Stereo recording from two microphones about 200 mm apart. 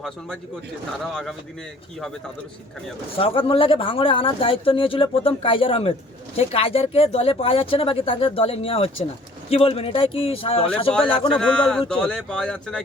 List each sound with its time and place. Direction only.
1.1 s speech: centre (ahead or behind)
3.2 s speech: 25° left (ahead or behind)
11.3 s speech: 5° left (ahead or behind)